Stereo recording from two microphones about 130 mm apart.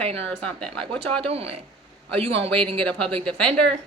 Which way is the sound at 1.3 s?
50° right (ahead or behind).